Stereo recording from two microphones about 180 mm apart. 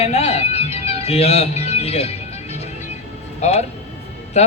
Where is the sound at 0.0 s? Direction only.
35° left (ahead or behind).